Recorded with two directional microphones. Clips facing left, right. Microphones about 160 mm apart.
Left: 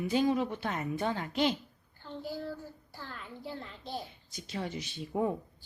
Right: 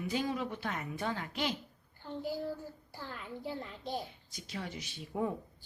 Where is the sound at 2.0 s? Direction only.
15° right (ahead or behind).